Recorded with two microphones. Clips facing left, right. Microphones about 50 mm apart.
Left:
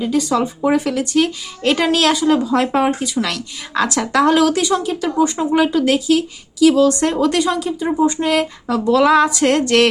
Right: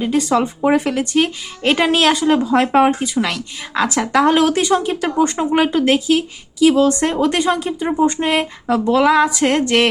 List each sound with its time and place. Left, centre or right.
0.0 s a woman's voice: right; by 4.3 s centre
4.3 s a woman's voice: right
9.0 s a woman's voice: centre
9.6 s a woman's voice: centre